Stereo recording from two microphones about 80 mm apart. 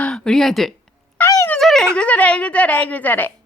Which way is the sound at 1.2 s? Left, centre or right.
Left.